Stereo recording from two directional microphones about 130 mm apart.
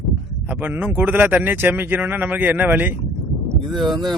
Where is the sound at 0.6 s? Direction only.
10° right (ahead or behind).